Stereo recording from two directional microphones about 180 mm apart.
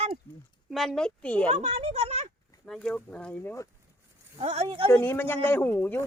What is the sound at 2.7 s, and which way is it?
Speech, 5° left (ahead or behind).